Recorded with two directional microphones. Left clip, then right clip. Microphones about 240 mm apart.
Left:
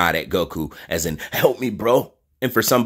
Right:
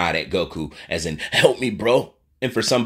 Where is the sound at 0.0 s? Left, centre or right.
Centre.